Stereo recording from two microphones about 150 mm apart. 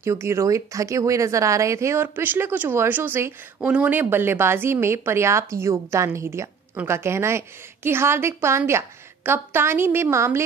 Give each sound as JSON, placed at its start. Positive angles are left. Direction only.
{"t": 0.0, "sound": "speech", "side_deg": -20}